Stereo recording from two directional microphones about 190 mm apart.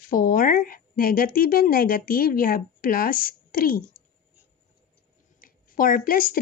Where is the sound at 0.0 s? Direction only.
45° left (ahead or behind).